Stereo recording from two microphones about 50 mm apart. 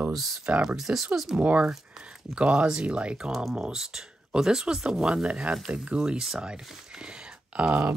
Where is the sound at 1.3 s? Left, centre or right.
Right.